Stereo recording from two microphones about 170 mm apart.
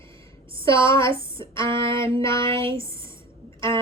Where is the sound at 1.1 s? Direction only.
30° right (ahead or behind).